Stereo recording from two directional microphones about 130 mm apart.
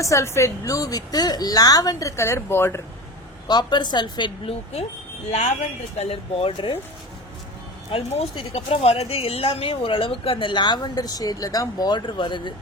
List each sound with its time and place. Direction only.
0.0 s a woman's voice: 25° left (ahead or behind)
3.4 s speech: 35° left (ahead or behind)
6.0 s speech: 45° left (ahead or behind)
7.9 s speech: 50° left (ahead or behind)